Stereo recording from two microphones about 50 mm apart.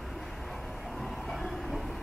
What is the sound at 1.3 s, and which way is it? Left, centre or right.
Train, centre.